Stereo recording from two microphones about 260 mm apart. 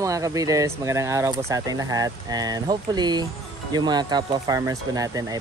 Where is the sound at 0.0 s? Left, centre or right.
Centre.